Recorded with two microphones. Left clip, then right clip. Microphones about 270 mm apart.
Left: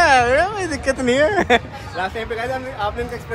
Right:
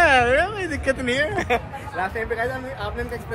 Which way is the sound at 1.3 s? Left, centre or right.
Left.